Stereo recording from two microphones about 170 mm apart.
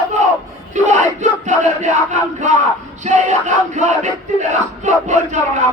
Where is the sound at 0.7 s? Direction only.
45° right (ahead or behind).